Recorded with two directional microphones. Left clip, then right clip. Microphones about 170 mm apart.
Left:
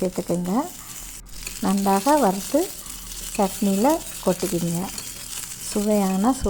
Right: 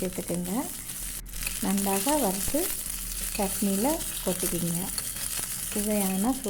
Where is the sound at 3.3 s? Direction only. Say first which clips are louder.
Left 7 dB; 30° left (ahead or behind).